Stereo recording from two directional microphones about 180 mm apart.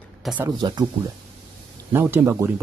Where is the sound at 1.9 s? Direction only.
10° right (ahead or behind).